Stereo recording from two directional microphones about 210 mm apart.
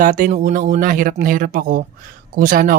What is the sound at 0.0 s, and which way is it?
Speech, 40° right (ahead or behind).